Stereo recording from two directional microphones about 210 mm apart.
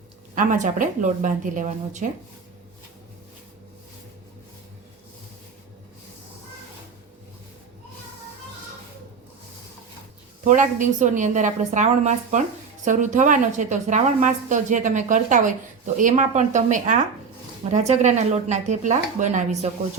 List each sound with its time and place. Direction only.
0.3 s a woman's voice: 40° right (ahead or behind)
10.4 s a woman's voice: 35° right (ahead or behind)